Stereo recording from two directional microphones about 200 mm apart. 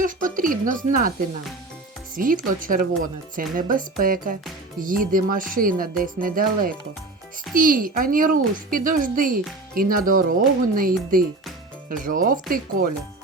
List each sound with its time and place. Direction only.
0.0 s speech: 40° right (ahead or behind)
2.1 s speech: 45° right (ahead or behind)